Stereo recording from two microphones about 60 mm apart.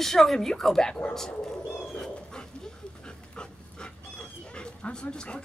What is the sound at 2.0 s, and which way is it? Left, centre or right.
Dog, centre.